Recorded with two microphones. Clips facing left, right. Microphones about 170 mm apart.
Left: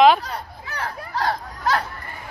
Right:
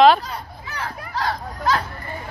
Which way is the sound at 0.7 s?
55° left (ahead or behind).